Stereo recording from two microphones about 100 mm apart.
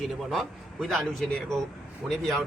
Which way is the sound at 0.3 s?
Centre (ahead or behind).